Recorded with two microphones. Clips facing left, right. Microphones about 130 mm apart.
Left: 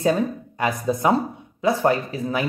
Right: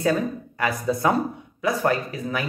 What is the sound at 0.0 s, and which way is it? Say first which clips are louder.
Speech: left 2 dB; 20° left (ahead or behind).